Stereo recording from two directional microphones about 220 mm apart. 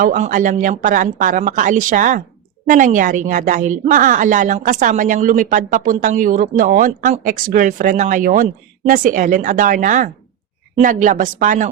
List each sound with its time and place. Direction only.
0.0 s a woman's voice: 35° right (ahead or behind)